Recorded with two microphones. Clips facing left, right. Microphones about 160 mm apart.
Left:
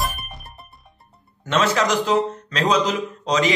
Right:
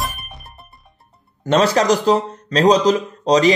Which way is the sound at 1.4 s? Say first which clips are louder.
Right 5 dB; 35° right (ahead or behind).